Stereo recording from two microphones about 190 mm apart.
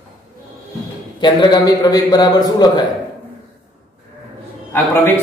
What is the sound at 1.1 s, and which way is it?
A man's voice, 25° left (ahead or behind).